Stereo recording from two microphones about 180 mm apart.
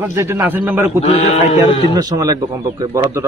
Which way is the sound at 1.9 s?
20° right (ahead or behind).